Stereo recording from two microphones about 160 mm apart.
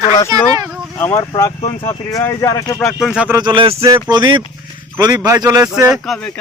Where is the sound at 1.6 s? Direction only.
35° left (ahead or behind).